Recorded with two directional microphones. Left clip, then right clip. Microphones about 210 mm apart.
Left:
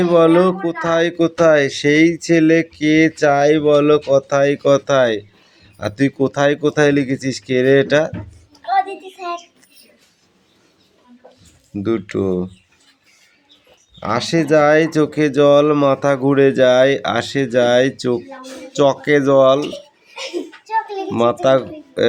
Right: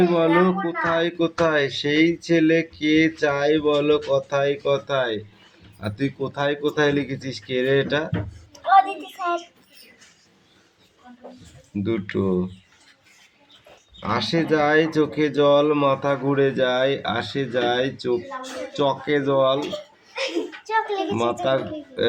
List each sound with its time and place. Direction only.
0.1 s speech: 45° left (ahead or behind)
8.7 s child singing: 15° right (ahead or behind)
11.8 s speech: 40° left (ahead or behind)
14.0 s speech: 40° left (ahead or behind)
20.7 s a sound: 25° right (ahead or behind)
21.4 s speech: 45° left (ahead or behind)